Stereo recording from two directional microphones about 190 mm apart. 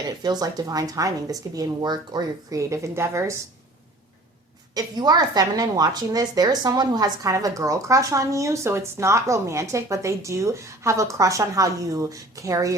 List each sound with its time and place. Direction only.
0.2 s speech: 20° right (ahead or behind)
4.7 s a woman's voice: 20° right (ahead or behind)